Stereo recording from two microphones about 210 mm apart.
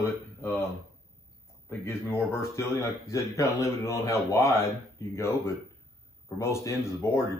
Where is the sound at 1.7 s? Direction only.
10° left (ahead or behind).